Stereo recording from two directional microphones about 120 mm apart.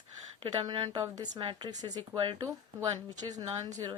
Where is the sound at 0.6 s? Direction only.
40° right (ahead or behind).